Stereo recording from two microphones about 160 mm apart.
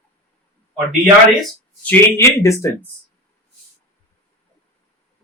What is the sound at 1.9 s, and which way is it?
Speech, 15° left (ahead or behind).